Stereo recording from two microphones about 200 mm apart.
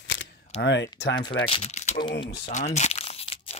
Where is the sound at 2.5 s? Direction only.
35° left (ahead or behind).